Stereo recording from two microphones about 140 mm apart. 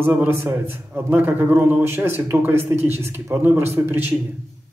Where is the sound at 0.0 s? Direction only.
15° right (ahead or behind).